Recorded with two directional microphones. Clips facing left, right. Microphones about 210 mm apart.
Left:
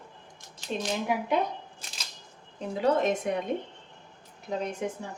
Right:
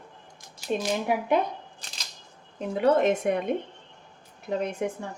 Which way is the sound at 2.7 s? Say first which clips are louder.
Right 4 dB; 60° right (ahead or behind).